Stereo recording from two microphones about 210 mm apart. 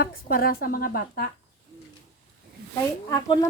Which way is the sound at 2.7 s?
20° left (ahead or behind).